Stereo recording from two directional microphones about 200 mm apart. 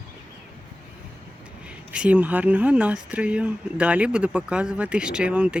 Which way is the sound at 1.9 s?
5° right (ahead or behind).